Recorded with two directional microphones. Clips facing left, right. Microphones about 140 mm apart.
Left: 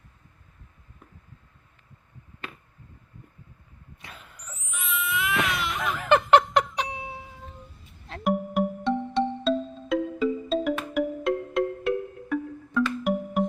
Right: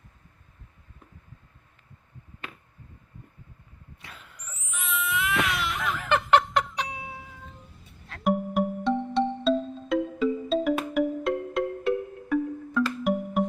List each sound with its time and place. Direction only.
4.4 s a sound: centre (ahead or behind)
5.5 s music: 20° left (ahead or behind)
8.2 s music: centre (ahead or behind)